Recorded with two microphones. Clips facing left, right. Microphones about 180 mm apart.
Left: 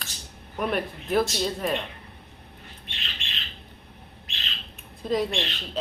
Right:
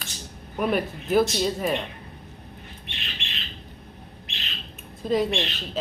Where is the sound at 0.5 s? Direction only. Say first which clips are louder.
Right 3 dB; centre (ahead or behind).